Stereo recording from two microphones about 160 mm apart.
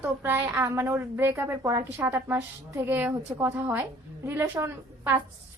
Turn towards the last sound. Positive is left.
turn(degrees=-15)  # may be behind; listen again after turning